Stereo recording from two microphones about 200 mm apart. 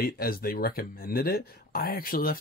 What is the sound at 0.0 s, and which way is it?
Speech, 50° left (ahead or behind).